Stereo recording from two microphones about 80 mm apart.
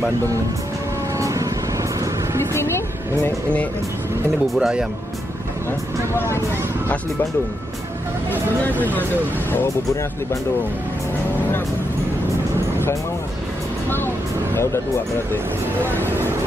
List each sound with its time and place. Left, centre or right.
1.2 s vehicle: right
2.5 s vehicle: left
4.6 s speech: centre
13.8 s speech: left
15.9 s speech: left